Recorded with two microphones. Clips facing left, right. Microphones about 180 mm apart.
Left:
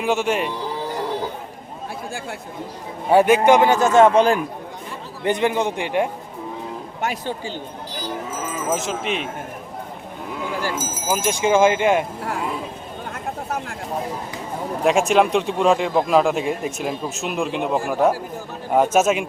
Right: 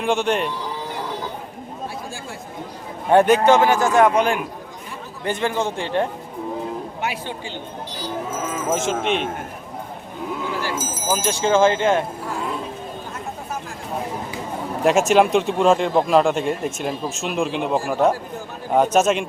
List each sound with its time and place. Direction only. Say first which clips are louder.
0.0 s speech: even; 5° left (ahead or behind)
3.1 s a man's voice: even; 5° left (ahead or behind); by 4.4 s 30° left (ahead or behind)
5.2 s speech: left 3 dB; 20° left (ahead or behind)
7.0 s speech: left 6 dB; 40° left (ahead or behind)
8.7 s speech: right 3 dB; centre (ahead or behind)
11.1 s speech: left 1 dB; 10° left (ahead or behind)
14.8 s speech: right 1 dB; centre (ahead or behind)